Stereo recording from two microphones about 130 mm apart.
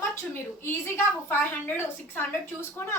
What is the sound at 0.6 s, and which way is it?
A woman's voice, 20° left (ahead or behind).